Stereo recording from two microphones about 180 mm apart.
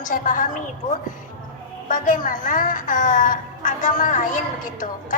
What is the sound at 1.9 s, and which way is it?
A woman's voice, 45° left (ahead or behind).